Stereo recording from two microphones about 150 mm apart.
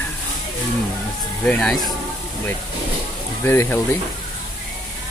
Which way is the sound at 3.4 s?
15° left (ahead or behind).